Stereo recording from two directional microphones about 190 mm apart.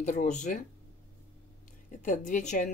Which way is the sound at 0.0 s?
40° left (ahead or behind).